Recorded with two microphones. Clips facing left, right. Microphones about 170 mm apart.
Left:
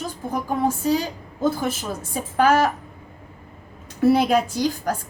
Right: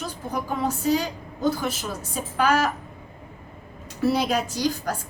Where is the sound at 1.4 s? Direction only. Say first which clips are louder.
Left 2 dB; 50° left (ahead or behind).